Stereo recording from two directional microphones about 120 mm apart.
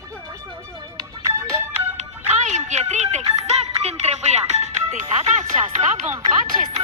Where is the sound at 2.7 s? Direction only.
75° right (ahead or behind).